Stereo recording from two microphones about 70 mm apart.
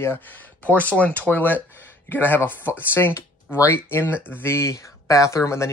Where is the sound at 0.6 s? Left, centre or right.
Left.